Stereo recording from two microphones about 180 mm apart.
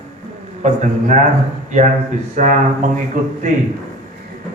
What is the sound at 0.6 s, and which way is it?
Speech, 45° right (ahead or behind).